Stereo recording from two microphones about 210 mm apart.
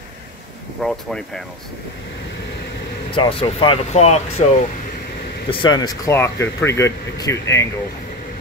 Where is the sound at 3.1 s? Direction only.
25° left (ahead or behind).